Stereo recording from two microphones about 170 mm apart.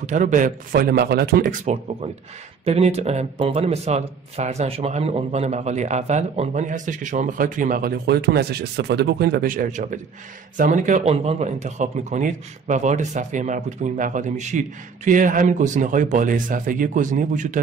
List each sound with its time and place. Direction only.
0.0 s speech: 50° right (ahead or behind)
2.6 s speech: 40° right (ahead or behind)